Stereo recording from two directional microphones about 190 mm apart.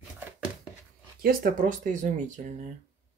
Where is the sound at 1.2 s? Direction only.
45° right (ahead or behind).